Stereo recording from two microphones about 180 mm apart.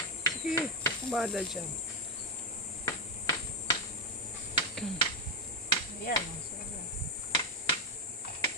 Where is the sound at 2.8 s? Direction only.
20° left (ahead or behind).